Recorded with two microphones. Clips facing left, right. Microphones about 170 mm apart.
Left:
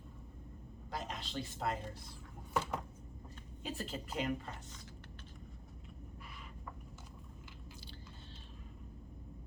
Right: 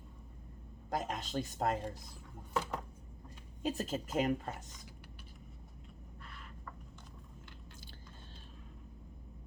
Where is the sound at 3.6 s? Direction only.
40° right (ahead or behind).